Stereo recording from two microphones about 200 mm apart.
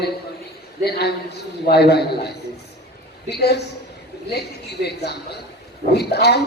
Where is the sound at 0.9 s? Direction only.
55° left (ahead or behind).